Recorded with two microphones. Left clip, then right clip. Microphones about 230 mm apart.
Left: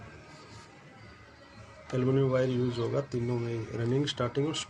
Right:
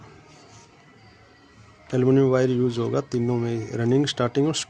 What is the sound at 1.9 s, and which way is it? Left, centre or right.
Speech, right.